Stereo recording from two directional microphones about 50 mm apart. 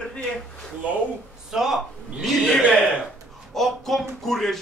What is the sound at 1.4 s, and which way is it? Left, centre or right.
Speech, centre.